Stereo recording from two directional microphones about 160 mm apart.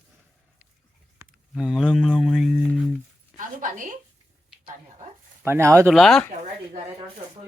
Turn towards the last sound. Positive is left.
turn(degrees=0)  # may be behind; listen again after turning